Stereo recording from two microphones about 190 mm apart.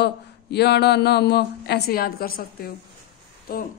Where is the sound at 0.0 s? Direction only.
60° left (ahead or behind).